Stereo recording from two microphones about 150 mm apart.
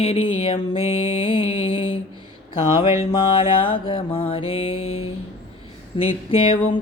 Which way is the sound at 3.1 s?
35° left (ahead or behind).